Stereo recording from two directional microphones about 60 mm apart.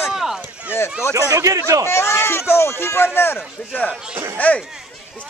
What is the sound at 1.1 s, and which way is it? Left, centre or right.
Speech, right.